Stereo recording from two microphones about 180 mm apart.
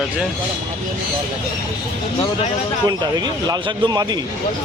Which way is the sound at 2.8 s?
25° right (ahead or behind).